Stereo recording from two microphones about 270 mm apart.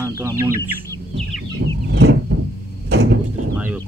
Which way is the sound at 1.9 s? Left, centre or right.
Right.